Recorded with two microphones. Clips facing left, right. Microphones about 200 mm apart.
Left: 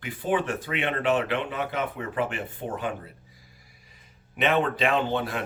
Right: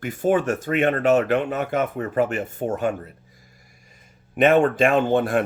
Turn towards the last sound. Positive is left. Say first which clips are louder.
# right 7 dB
turn(degrees=-50)  # may be behind; listen again after turning